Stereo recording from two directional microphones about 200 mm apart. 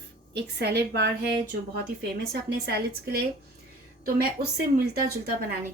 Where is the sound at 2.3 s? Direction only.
55° right (ahead or behind).